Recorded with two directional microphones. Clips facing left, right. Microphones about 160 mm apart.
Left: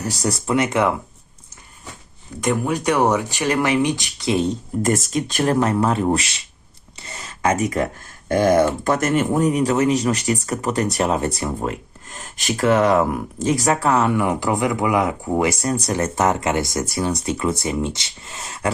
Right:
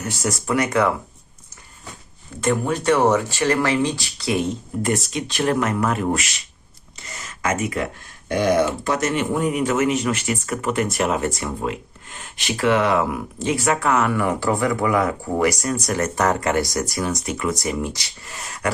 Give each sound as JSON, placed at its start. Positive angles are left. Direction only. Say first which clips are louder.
{"t": 0.0, "sound": "speech", "louder": "left 2 dB", "side_deg": 35}
{"t": 2.4, "sound": "speech", "louder": "even", "side_deg": 15}
{"t": 4.8, "sound": "speech", "louder": "left 3 dB", "side_deg": 45}
{"t": 6.9, "sound": "a sound", "louder": "left 1 dB", "side_deg": 30}
{"t": 8.3, "sound": "speech", "louder": "left 3 dB", "side_deg": 45}